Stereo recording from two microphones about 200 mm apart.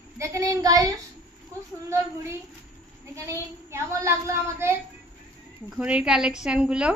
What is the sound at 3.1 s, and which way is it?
A woman's voice, 15° right (ahead or behind).